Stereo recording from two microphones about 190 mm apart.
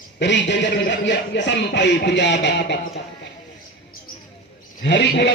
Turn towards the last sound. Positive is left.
turn(degrees=65)  # may be behind; listen again after turning